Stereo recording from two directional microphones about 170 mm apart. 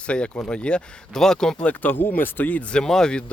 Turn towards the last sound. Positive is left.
turn(degrees=5)  # may be behind; listen again after turning